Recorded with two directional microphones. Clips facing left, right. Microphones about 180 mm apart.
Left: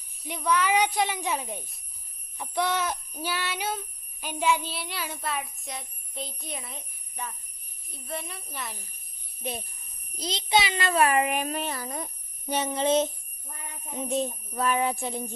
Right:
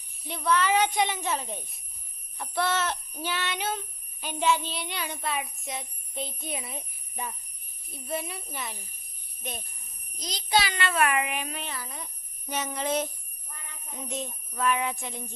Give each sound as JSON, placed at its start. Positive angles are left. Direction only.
{"t": 0.3, "sound": "a child's voice", "side_deg": 10}
{"t": 9.4, "sound": "a child's voice", "side_deg": 30}
{"t": 10.8, "sound": "speech", "side_deg": 35}
{"t": 12.5, "sound": "a child's voice", "side_deg": 30}
{"t": 13.9, "sound": "a sound", "side_deg": 30}